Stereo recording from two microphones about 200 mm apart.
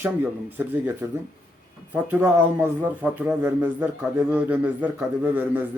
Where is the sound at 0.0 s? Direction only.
10° right (ahead or behind).